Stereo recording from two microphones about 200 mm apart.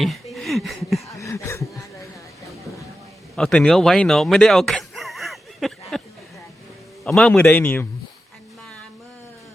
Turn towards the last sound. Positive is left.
turn(degrees=10)  # may be behind; listen again after turning